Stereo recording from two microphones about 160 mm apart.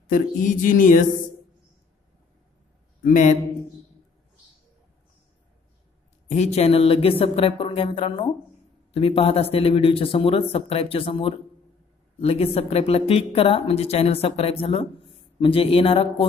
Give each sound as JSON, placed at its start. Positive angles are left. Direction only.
{"t": 0.1, "sound": "a sound", "side_deg": 55}
{"t": 3.0, "sound": "a man's voice", "side_deg": 50}
{"t": 6.2, "sound": "speech", "side_deg": 45}